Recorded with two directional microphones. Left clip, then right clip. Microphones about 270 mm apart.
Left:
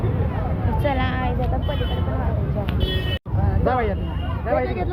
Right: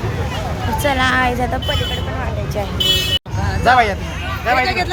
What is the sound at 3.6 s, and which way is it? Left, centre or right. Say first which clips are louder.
Speech: right 10 dB; right.